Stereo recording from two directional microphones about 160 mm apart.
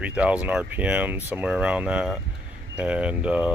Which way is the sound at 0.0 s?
10° right (ahead or behind).